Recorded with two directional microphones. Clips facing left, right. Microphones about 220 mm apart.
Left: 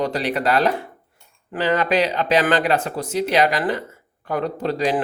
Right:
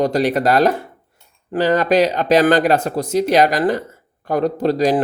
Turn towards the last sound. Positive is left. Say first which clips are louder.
# right 5 dB
turn(degrees=-40)  # may be behind; listen again after turning